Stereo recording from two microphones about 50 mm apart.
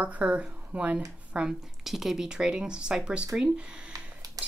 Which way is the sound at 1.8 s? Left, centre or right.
Centre.